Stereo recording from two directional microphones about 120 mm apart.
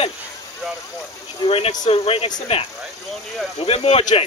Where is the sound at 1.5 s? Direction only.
50° left (ahead or behind).